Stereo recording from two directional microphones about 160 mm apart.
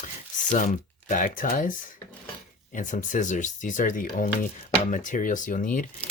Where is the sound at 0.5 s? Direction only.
55° left (ahead or behind).